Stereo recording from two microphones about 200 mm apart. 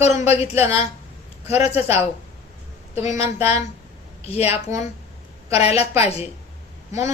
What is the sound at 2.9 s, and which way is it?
Speech, 35° left (ahead or behind).